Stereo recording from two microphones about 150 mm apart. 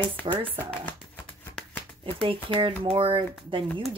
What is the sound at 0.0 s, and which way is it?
Speech, 35° right (ahead or behind).